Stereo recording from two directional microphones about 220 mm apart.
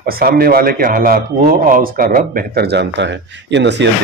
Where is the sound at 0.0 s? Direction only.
45° right (ahead or behind).